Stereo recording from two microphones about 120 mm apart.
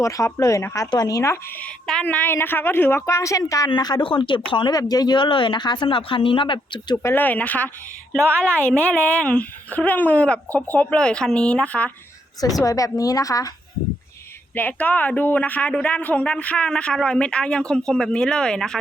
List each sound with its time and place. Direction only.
0.0 s a woman's voice: 25° left (ahead or behind)
1.6 s speech: 10° left (ahead or behind); by 7.0 s 35° left (ahead or behind)
7.0 s speech: 15° left (ahead or behind)
12.6 s a woman's voice: 30° left (ahead or behind)
14.5 s speech: 15° left (ahead or behind)